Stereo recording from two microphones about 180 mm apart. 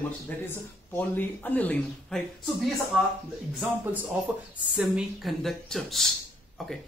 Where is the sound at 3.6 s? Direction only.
5° right (ahead or behind).